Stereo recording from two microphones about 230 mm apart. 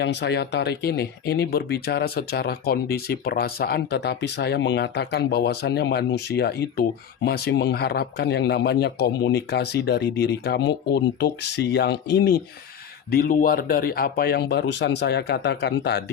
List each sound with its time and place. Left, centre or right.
0.0 s speech: left